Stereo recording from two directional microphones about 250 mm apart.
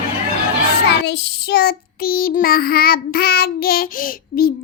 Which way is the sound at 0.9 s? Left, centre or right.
Left.